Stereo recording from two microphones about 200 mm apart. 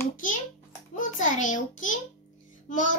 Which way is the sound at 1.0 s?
40° left (ahead or behind).